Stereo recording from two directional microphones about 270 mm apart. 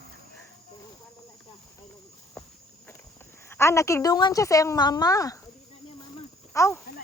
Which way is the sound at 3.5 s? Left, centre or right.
Centre.